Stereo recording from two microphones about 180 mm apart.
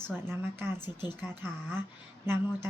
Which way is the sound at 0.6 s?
10° right (ahead or behind).